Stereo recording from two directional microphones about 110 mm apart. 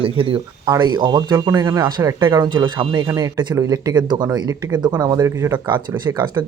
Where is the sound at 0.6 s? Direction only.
40° right (ahead or behind).